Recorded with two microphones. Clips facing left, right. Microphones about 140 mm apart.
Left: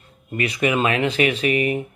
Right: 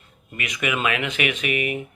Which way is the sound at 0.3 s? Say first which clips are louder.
Left 6 dB; 35° left (ahead or behind).